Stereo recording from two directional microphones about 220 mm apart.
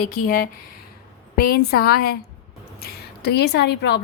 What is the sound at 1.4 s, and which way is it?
A woman's voice, 45° left (ahead or behind).